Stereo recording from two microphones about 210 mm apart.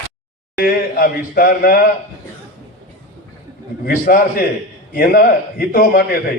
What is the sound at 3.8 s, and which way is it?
A man's voice, 45° left (ahead or behind).